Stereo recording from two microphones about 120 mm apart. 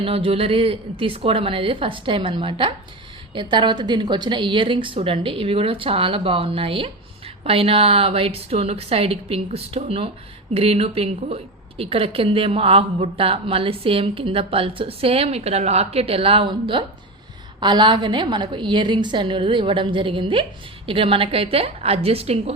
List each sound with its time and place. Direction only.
0.0 s a woman's voice: 50° right (ahead or behind)